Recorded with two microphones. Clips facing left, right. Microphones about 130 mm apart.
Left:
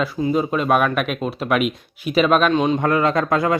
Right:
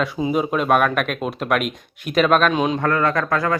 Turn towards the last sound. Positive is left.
turn(degrees=20)  # may be behind; listen again after turning